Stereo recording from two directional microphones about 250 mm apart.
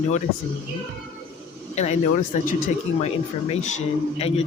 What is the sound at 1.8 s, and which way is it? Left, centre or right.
Speech, left.